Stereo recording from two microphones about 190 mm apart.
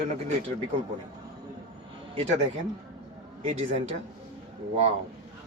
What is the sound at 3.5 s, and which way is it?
Speech, 30° right (ahead or behind).